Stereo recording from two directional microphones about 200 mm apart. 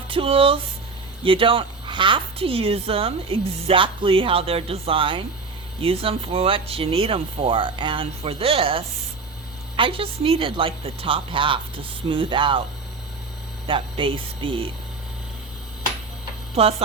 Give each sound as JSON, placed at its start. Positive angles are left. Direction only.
{"t": 0.1, "sound": "speech", "side_deg": -25}
{"t": 13.7, "sound": "speech", "side_deg": -25}
{"t": 16.6, "sound": "speech", "side_deg": -30}